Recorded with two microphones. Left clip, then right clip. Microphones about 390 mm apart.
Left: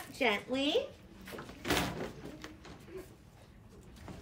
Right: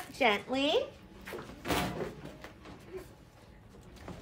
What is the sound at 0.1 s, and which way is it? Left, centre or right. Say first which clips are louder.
Speech: right 3 dB; centre.